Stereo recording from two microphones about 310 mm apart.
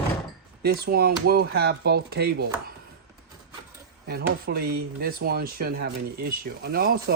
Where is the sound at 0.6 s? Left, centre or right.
Right.